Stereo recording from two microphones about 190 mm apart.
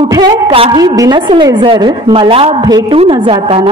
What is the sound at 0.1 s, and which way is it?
A woman's voice, 20° right (ahead or behind).